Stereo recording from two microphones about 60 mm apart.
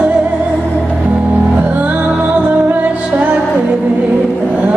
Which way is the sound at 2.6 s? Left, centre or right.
Right.